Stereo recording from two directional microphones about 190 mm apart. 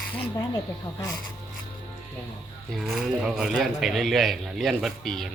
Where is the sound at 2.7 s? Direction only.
Centre (ahead or behind).